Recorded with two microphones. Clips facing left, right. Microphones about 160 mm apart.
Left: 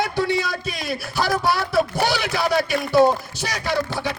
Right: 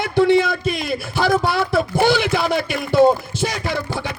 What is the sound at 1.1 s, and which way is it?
Speech, 55° right (ahead or behind).